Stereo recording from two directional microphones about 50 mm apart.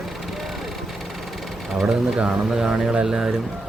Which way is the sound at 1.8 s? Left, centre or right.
Centre.